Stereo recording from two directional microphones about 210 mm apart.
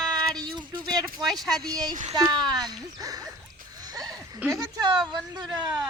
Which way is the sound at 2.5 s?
20° right (ahead or behind).